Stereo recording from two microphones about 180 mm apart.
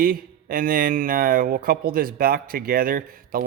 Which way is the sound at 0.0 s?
50° right (ahead or behind).